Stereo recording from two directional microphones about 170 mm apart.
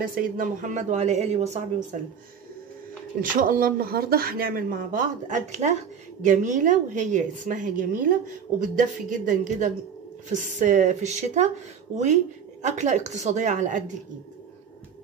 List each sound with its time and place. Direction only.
0.0 s a woman's voice: 55° right (ahead or behind)
3.2 s a woman's voice: 55° right (ahead or behind)
12.6 s a woman's voice: 45° right (ahead or behind)